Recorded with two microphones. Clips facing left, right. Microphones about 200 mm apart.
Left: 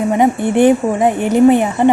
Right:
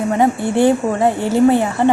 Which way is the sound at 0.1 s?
20° left (ahead or behind).